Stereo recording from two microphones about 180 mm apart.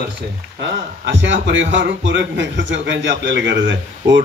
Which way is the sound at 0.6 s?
85° right.